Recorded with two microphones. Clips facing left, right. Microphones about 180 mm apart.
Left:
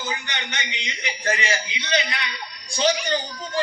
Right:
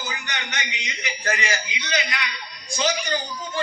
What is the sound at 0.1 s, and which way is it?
A man's voice, 30° left (ahead or behind).